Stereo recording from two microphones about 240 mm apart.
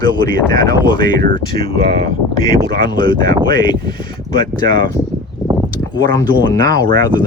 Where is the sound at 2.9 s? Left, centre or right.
Centre.